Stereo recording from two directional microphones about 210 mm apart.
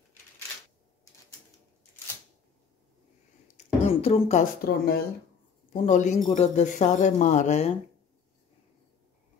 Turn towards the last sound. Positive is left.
turn(degrees=30)  # may be behind; listen again after turning